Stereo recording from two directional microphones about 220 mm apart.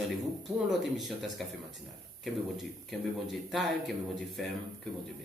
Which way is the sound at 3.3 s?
Centre (ahead or behind).